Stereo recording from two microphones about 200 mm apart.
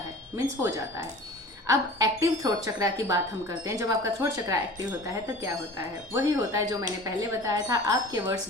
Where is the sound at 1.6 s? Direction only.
15° right (ahead or behind).